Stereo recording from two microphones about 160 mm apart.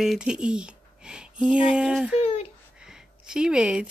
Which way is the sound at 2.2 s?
40° left (ahead or behind).